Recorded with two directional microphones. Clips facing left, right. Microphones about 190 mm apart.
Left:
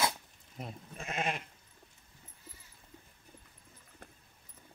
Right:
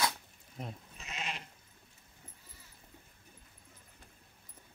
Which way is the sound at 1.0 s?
50° left (ahead or behind).